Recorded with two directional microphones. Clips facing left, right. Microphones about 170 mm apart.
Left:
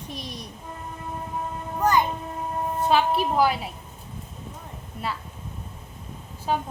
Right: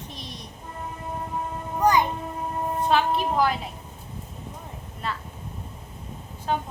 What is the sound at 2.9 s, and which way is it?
Speech, 5° left (ahead or behind).